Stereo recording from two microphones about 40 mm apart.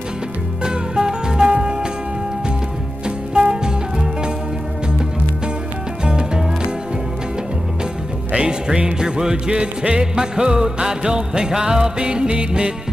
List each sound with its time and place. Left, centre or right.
0.7 s music: centre
3.3 s music: right
6.0 s music: right
8.4 s music: right